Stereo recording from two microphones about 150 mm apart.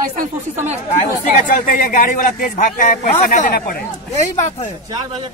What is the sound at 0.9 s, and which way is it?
A man's voice, 65° left (ahead or behind).